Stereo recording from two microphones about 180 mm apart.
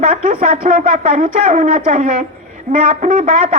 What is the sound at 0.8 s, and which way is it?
Speech, 50° right (ahead or behind).